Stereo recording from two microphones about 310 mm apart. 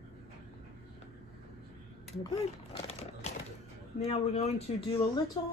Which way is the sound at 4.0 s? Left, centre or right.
Centre.